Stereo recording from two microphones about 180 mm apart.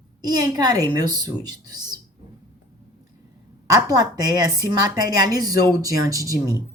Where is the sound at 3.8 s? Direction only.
20° right (ahead or behind).